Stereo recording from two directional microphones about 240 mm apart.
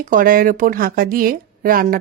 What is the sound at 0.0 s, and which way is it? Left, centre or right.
Speech, right.